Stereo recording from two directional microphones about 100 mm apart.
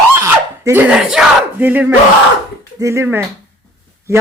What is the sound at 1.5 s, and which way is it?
Speech, 20° right (ahead or behind).